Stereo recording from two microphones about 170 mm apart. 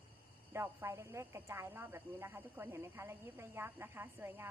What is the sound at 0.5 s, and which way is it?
A woman's voice, 15° right (ahead or behind).